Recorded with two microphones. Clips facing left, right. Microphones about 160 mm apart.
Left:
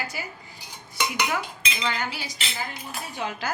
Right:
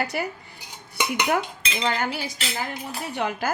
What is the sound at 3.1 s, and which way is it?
Speech, 55° right (ahead or behind).